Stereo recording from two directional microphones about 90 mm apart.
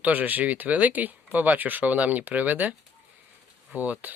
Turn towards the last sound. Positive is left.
turn(degrees=-20)  # may be behind; listen again after turning